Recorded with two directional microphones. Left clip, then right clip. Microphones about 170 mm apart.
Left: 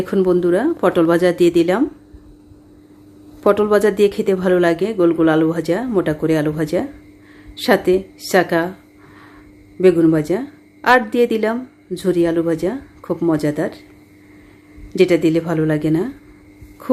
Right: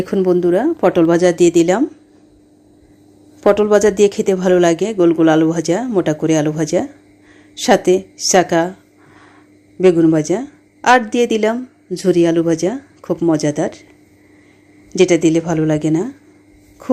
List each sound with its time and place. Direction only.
0.0 s speech: 15° right (ahead or behind)
3.4 s speech: 15° right (ahead or behind)
9.8 s speech: 15° right (ahead or behind)
14.9 s speech: 20° right (ahead or behind)